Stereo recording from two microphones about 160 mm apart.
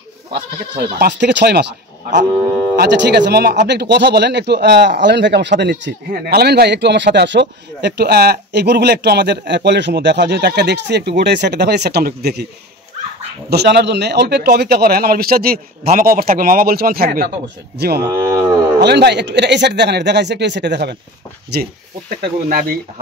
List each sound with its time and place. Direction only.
0.9 s speech: 90° right
13.5 s a man's voice: 90° right; by 17.3 s 70° right (ahead or behind)
17.7 s speech: 90° right
18.0 s cattle: 20° right (ahead or behind)
18.8 s speech: 90° right
22.1 s a man's voice: 70° right (ahead or behind)